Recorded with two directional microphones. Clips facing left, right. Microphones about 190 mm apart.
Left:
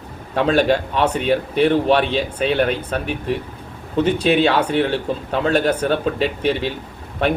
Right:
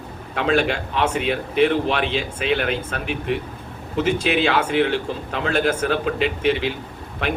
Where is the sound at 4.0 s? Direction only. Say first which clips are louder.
Left 4 dB; 35° left (ahead or behind).